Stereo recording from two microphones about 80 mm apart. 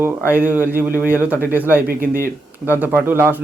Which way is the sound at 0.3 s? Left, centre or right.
Right.